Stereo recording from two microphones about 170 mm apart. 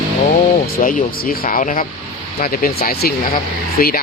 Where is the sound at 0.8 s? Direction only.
55° left (ahead or behind).